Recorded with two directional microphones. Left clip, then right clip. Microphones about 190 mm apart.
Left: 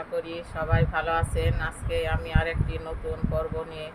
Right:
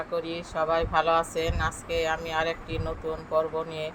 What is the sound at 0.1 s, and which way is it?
Speech, 20° right (ahead or behind).